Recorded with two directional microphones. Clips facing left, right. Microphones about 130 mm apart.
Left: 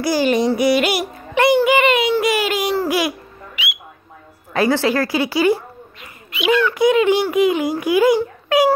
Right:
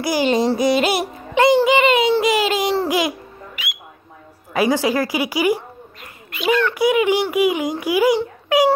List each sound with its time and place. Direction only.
0.0 s a child's voice: 20° right (ahead or behind)
3.5 s bird: 45° right (ahead or behind)
4.6 s a child's voice: 15° right (ahead or behind)
6.3 s a child's voice: 45° right (ahead or behind)
6.7 s a child's voice: 10° right (ahead or behind)